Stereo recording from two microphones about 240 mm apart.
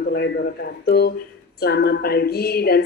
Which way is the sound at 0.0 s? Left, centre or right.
Left.